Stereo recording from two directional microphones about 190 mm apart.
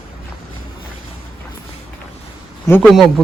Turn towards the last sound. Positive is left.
turn(degrees=0)  # may be behind; listen again after turning